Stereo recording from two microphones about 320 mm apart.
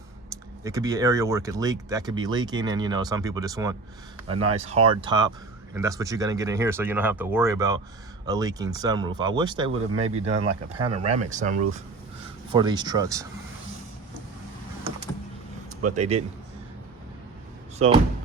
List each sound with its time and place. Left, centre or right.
0.6 s speech: centre
16.0 s speech: centre
17.7 s speech: centre